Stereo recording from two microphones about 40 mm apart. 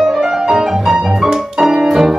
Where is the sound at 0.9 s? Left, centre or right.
Centre.